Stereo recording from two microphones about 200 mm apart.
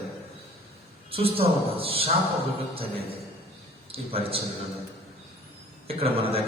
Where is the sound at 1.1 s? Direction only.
30° right (ahead or behind).